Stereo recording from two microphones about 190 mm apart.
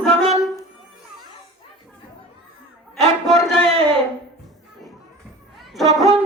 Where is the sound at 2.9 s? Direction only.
Centre (ahead or behind).